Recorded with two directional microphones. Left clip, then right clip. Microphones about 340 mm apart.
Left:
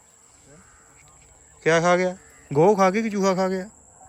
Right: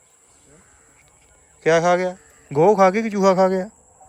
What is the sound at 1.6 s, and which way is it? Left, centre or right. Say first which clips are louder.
Speech: right 2 dB; centre.